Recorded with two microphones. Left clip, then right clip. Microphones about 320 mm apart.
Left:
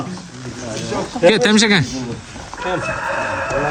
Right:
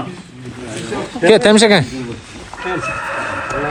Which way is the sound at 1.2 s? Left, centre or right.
Centre.